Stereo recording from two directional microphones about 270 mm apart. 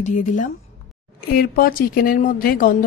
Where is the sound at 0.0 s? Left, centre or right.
Left.